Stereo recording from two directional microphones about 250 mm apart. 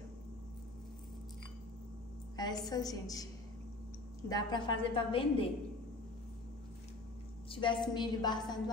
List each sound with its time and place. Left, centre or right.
2.3 s a sound: centre
2.7 s a woman's voice: centre
7.4 s a woman's voice: left